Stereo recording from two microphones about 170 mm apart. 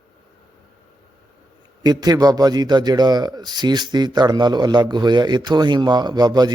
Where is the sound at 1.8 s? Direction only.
25° right (ahead or behind).